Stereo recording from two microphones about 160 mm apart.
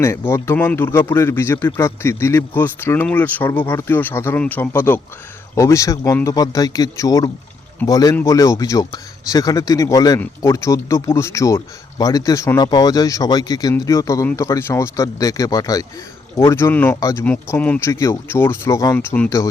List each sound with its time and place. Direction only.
0.0 s speech: 15° left (ahead or behind)
18.9 s speech: 10° left (ahead or behind)